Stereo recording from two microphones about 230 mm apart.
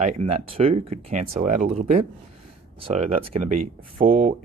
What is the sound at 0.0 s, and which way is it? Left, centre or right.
Speech, right.